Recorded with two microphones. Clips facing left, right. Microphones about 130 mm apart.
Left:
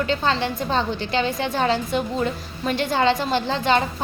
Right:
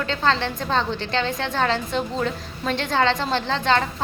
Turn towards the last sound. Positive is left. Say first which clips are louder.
# left 1 dB
turn(degrees=10)  # may be behind; listen again after turning